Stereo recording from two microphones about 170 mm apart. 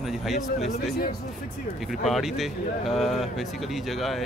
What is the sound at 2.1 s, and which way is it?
Speech, centre (ahead or behind).